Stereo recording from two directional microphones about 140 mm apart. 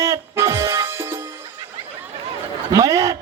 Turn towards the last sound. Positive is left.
turn(degrees=-25)  # may be behind; listen again after turning